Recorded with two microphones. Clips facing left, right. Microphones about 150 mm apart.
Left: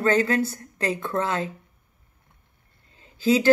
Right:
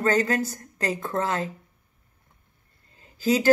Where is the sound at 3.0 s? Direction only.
40° right (ahead or behind).